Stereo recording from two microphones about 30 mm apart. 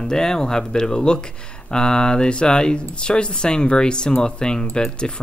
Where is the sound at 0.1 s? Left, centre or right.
Centre.